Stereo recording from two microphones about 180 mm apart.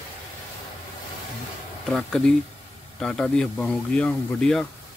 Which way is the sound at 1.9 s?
5° left (ahead or behind).